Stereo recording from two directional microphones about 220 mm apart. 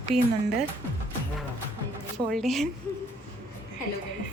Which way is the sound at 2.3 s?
Centre (ahead or behind).